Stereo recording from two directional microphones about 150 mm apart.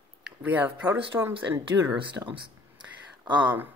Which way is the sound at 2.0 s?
35° right (ahead or behind).